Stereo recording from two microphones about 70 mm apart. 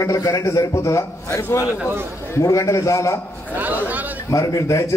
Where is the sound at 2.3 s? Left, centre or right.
Left.